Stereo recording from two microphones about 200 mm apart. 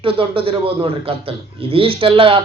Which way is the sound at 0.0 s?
25° right (ahead or behind).